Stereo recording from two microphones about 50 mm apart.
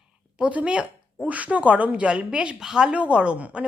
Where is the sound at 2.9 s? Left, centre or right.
Right.